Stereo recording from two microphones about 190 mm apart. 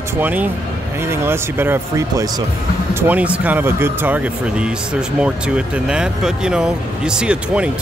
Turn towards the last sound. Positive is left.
turn(degrees=-5)  # may be behind; listen again after turning